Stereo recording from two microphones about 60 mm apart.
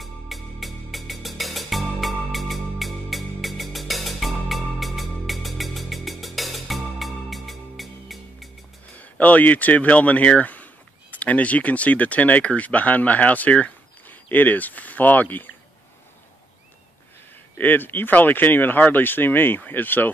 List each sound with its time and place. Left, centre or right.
0.0 s music: centre
8.9 s speech: left
17.6 s speech: left